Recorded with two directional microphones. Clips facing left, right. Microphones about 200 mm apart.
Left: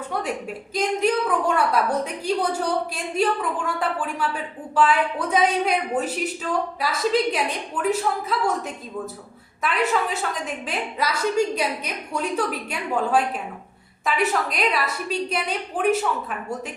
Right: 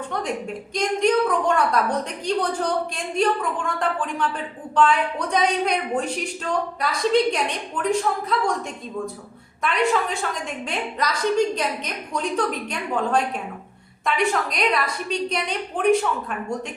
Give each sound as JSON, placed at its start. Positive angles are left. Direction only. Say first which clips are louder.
{"t": 0.1, "sound": "a woman's voice", "louder": "even", "side_deg": 5}
{"t": 9.6, "sound": "a woman's voice", "louder": "right 1 dB", "side_deg": 5}